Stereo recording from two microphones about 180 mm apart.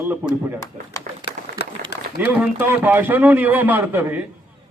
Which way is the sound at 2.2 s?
10° right (ahead or behind).